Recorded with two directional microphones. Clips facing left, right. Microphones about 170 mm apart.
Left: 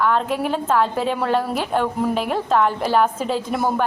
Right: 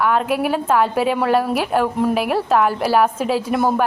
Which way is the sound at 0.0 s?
10° right (ahead or behind).